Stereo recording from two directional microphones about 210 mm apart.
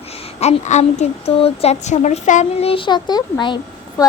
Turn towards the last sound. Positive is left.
turn(degrees=20)  # may be behind; listen again after turning